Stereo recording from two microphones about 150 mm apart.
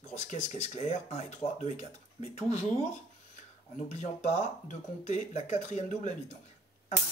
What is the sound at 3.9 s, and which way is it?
Speech, 50° left (ahead or behind).